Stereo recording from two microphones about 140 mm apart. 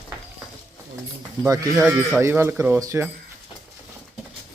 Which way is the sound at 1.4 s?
25° right (ahead or behind).